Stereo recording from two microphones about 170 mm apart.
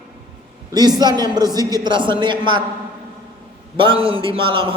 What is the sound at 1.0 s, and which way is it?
Speech, 25° right (ahead or behind).